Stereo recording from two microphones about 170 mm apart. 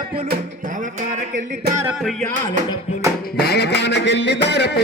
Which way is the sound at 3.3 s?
70° left (ahead or behind).